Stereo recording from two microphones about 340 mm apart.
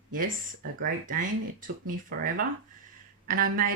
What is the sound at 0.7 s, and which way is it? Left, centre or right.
Speech, right.